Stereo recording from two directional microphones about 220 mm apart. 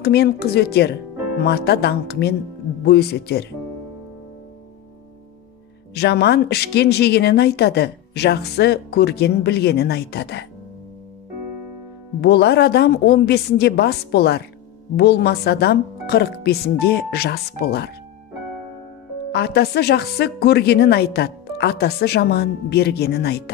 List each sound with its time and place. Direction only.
0.0 s speech: 45° left (ahead or behind)
5.9 s speech: 50° left (ahead or behind)
12.2 s speech: 50° left (ahead or behind)
19.3 s speech: 45° left (ahead or behind)